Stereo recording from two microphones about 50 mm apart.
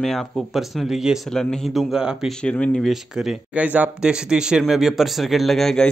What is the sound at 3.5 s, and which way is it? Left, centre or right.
Speech, right.